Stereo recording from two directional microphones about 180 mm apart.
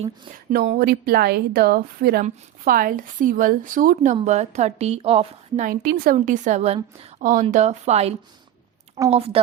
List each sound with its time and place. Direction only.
0.5 s a woman's voice: 55° right (ahead or behind); by 5.6 s 30° right (ahead or behind)
5.6 s a woman's voice: 60° right (ahead or behind); by 9.4 s 35° right (ahead or behind)